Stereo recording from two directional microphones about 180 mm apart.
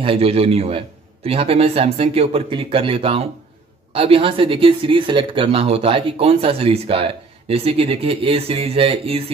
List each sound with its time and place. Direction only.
0.0 s speech: 30° right (ahead or behind)